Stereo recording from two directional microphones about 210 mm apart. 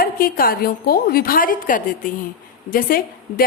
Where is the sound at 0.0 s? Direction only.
45° left (ahead or behind).